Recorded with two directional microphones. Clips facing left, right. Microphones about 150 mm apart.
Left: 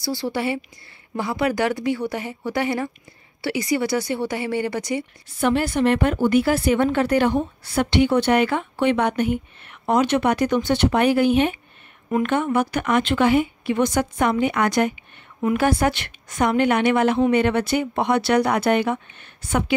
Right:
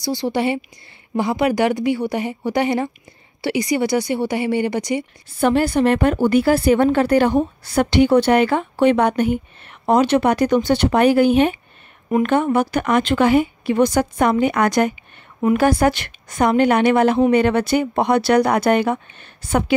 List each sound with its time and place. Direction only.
0.0 s a woman's voice: 20° right (ahead or behind)
5.4 s speech: 35° right (ahead or behind)